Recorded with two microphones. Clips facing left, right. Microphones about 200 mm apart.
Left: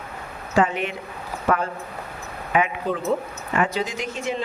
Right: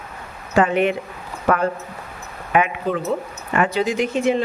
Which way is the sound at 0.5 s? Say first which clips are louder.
Right 4 dB; 60° right (ahead or behind).